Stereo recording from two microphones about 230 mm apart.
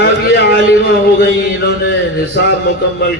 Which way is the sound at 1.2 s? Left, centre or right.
Left.